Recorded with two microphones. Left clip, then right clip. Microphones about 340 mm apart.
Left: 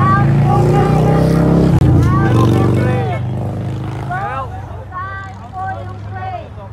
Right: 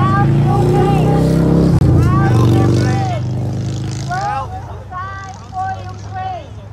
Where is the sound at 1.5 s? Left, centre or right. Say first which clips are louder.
Left 1 dB; left.